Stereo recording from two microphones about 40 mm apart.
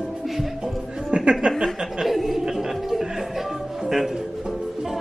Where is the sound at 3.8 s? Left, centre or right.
Centre.